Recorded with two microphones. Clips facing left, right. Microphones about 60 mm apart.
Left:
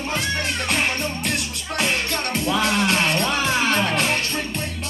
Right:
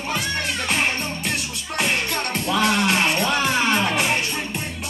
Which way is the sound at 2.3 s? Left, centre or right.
Centre.